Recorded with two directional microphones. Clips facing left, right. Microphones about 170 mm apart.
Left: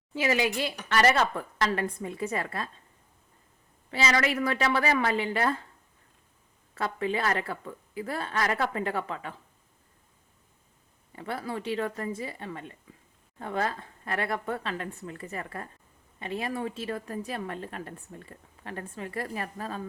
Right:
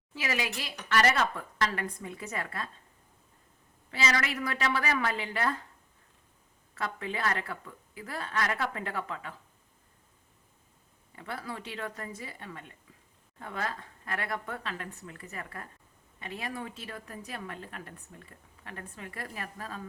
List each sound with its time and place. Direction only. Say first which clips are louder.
0.1 s speech: left 7 dB; 25° left (ahead or behind)
3.9 s speech: left 5 dB; 30° left (ahead or behind)
6.7 s speech: left 6 dB; 30° left (ahead or behind)
11.1 s speech: left 5 dB; 30° left (ahead or behind)